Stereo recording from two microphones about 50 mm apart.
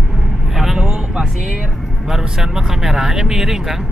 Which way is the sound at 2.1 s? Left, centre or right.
Centre.